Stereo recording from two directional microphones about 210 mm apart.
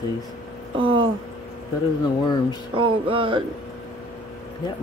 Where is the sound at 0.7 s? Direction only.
25° right (ahead or behind).